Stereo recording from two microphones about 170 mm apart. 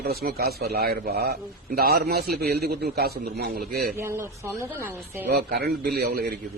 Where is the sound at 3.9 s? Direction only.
15° right (ahead or behind).